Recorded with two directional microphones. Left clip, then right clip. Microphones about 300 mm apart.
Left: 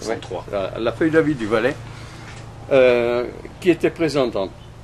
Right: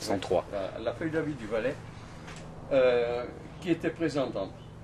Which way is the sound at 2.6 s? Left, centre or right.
Left.